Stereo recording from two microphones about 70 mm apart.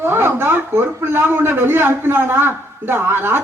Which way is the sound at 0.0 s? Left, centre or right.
Right.